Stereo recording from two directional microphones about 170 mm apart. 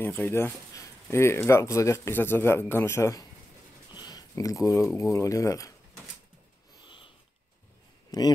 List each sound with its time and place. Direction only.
0.0 s speech: 15° left (ahead or behind)
6.8 s sniff: 30° left (ahead or behind)
8.1 s speech: 20° left (ahead or behind)